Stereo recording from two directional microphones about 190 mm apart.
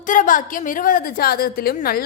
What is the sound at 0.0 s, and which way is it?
A woman's voice, 45° left (ahead or behind).